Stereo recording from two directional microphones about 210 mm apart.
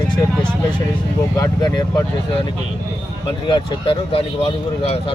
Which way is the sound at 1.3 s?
15° left (ahead or behind).